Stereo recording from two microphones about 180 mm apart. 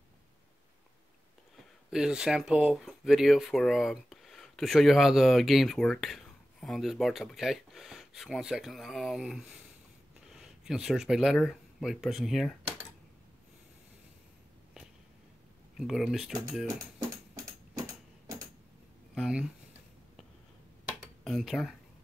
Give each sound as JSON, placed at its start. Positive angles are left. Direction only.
{"t": 1.9, "sound": "speech", "side_deg": -5}
{"t": 15.8, "sound": "speech", "side_deg": 0}
{"t": 17.7, "sound": "a sound", "side_deg": -20}
{"t": 19.1, "sound": "speech", "side_deg": -5}
{"t": 21.2, "sound": "speech", "side_deg": 0}